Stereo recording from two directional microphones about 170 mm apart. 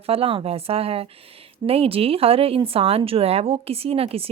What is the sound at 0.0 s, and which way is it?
A woman's voice, 35° right (ahead or behind).